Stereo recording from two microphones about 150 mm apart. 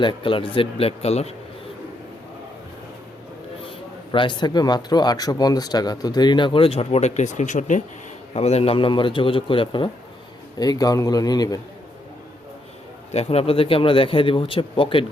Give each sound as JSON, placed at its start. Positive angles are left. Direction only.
{"t": 0.0, "sound": "speech", "side_deg": 35}
{"t": 4.1, "sound": "speech", "side_deg": 35}
{"t": 8.3, "sound": "speech", "side_deg": 45}
{"t": 13.1, "sound": "speech", "side_deg": 45}